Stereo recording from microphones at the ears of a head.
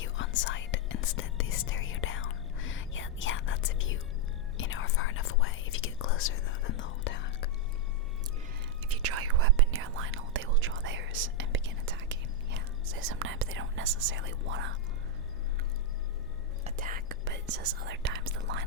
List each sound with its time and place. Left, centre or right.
0.0 s whispering: left
8.9 s whispering: right
16.6 s whispering: right